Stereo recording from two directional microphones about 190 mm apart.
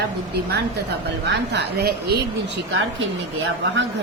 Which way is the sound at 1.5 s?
55° right (ahead or behind).